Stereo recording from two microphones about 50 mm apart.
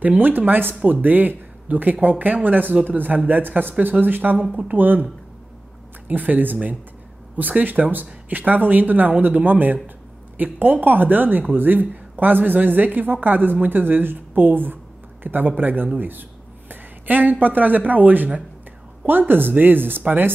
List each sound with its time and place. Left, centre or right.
0.2 s a woman's voice: right
6.0 s a woman's voice: right